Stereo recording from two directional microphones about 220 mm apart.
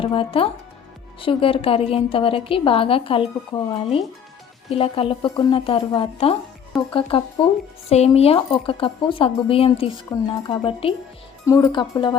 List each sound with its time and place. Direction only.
0.0 s a woman's voice: 25° left (ahead or behind)
6.7 s speech: centre (ahead or behind)
7.1 s a woman's voice: 25° left (ahead or behind)